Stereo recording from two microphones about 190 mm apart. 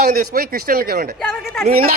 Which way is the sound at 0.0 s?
50° right (ahead or behind).